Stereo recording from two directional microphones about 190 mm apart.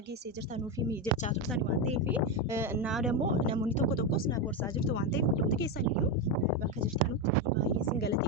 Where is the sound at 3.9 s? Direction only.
55° left (ahead or behind).